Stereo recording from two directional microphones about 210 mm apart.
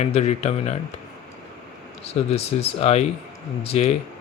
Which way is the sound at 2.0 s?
30° left (ahead or behind).